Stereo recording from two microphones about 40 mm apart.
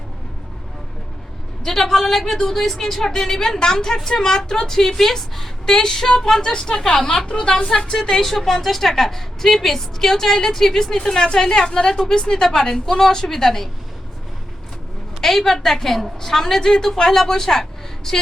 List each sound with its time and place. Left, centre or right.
1.6 s a woman's voice: centre
8.0 s a woman's voice: centre
15.2 s a woman's voice: centre